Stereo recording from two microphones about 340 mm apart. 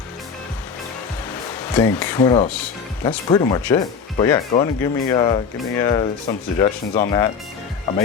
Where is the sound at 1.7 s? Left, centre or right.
Centre.